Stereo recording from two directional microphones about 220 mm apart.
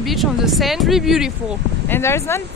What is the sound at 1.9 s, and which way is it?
Speech, 10° left (ahead or behind).